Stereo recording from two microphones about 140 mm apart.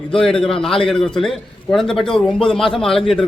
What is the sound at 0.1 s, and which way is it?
A man's voice, 5° left (ahead or behind).